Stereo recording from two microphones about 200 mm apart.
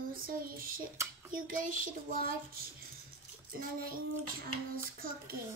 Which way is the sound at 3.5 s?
45° right (ahead or behind).